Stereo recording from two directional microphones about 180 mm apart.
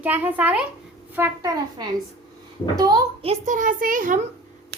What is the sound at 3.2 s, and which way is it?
Speech, 40° right (ahead or behind).